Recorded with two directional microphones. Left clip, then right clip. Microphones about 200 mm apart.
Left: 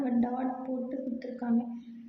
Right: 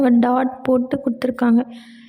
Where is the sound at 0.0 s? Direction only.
50° right (ahead or behind).